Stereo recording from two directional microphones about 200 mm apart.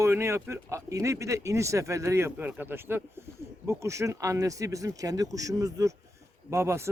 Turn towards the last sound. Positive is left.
turn(degrees=-15)  # may be behind; listen again after turning